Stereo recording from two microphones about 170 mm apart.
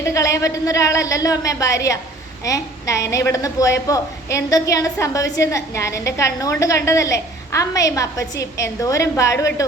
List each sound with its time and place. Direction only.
0.0 s a woman's voice: 20° left (ahead or behind)